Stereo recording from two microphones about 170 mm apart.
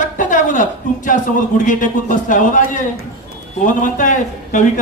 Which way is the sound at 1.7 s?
50° left (ahead or behind).